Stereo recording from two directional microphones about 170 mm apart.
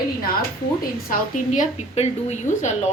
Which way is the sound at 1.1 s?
45° left (ahead or behind).